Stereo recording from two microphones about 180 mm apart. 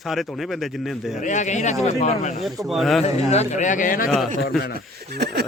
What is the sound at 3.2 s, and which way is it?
Speech, 35° left (ahead or behind).